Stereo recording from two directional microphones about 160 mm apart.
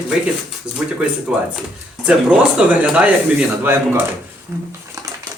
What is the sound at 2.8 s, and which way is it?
A man's voice, 10° right (ahead or behind).